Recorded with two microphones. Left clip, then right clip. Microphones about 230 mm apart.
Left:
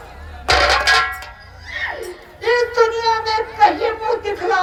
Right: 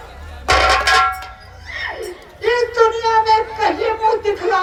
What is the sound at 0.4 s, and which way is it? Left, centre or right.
Music, left.